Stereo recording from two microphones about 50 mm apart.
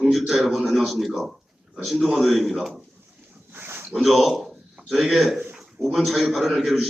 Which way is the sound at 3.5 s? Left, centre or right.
Right.